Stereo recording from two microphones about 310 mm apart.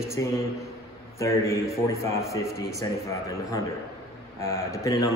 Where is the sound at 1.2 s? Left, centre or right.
Centre.